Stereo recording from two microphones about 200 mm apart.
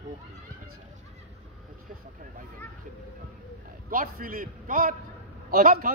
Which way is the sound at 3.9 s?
45° right (ahead or behind).